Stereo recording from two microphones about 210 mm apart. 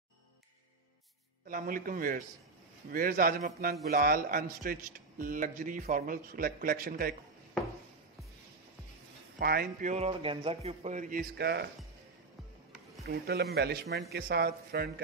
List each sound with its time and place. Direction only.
1.5 s a man's voice: 40° right (ahead or behind)
9.4 s a man's voice: 45° right (ahead or behind)
13.0 s a man's voice: 50° right (ahead or behind)